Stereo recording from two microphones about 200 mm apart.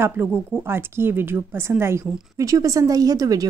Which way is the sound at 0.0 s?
10° right (ahead or behind).